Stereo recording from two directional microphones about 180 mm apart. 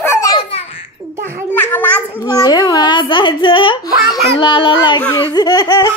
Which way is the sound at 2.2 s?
20° left (ahead or behind).